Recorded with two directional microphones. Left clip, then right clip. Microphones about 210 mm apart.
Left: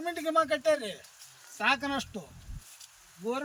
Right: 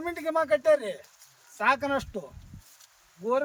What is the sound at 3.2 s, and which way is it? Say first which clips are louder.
Speech: right 6 dB; 45° right (ahead or behind).